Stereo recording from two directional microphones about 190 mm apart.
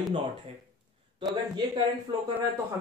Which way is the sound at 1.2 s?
25° right (ahead or behind).